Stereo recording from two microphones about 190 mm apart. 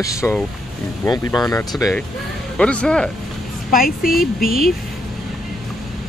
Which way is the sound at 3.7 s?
50° left (ahead or behind).